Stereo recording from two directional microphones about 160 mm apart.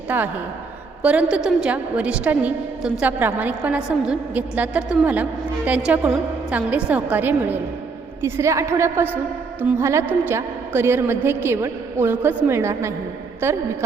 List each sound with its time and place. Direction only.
0.1 s a woman's voice: 10° right (ahead or behind)